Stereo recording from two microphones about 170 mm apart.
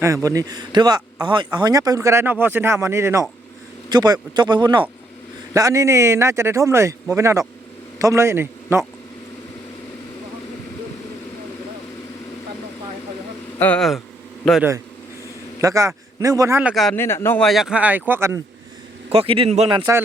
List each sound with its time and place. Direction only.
0.0 s a man's voice: 20° right (ahead or behind)
13.6 s speech: 5° left (ahead or behind)
15.6 s speech: 20° right (ahead or behind)
16.6 s speech: centre (ahead or behind)
16.9 s a man's voice: 15° left (ahead or behind)
17.4 s speech: centre (ahead or behind)
19.1 s a man's voice: 35° right (ahead or behind)